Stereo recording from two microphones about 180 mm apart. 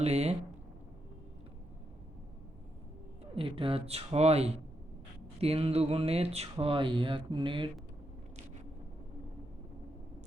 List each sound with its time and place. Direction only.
0.0 s speech: 35° right (ahead or behind)
3.3 s speech: 30° right (ahead or behind)